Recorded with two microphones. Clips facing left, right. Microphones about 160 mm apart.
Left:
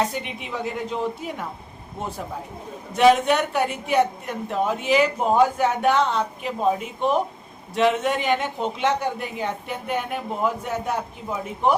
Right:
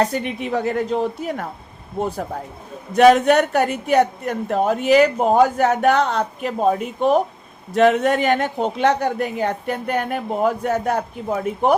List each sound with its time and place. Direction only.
0.0 s a woman's voice: 45° right (ahead or behind)
3.0 s a woman's voice: 45° right (ahead or behind)
4.3 s speech: 60° right (ahead or behind)
4.6 s a woman's voice: 45° right (ahead or behind)